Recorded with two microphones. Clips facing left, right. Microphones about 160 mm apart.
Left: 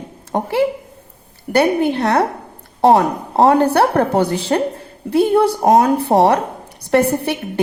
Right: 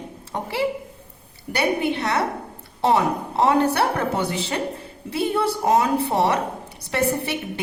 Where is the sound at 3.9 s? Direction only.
40° left (ahead or behind).